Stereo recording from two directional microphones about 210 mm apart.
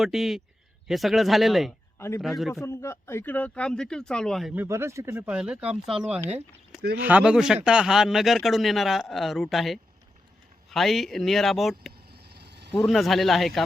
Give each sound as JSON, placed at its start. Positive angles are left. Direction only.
{"t": 0.0, "sound": "speech", "side_deg": 0}
{"t": 2.0, "sound": "speech", "side_deg": 10}
{"t": 2.2, "sound": "speech", "side_deg": 0}
{"t": 2.6, "sound": "speech", "side_deg": 10}
{"t": 11.9, "sound": "vehicle", "side_deg": -50}
{"t": 12.7, "sound": "speech", "side_deg": 0}